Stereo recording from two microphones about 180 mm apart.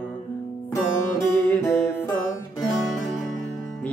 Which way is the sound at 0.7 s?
15° left (ahead or behind).